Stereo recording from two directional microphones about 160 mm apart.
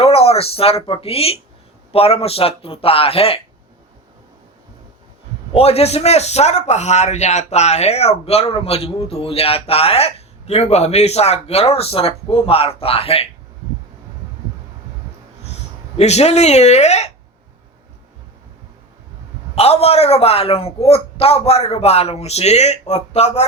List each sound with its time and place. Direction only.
0.0 s a man's voice: 40° left (ahead or behind)
5.5 s a man's voice: 40° left (ahead or behind)
16.0 s speech: 40° left (ahead or behind)
19.5 s a man's voice: 40° left (ahead or behind)